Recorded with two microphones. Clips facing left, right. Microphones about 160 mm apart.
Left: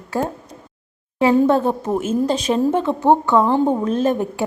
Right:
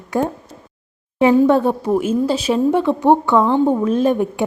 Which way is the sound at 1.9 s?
10° right (ahead or behind).